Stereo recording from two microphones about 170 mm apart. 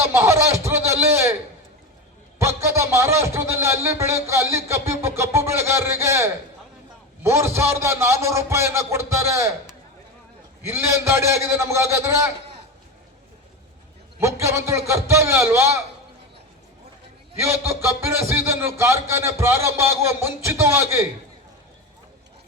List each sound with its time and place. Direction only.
0.1 s a sound: 15° right (ahead or behind)
2.4 s speech: 15° right (ahead or behind)
10.6 s speech: 15° right (ahead or behind)
14.2 s speech: 15° right (ahead or behind)
17.4 s speech: 15° right (ahead or behind)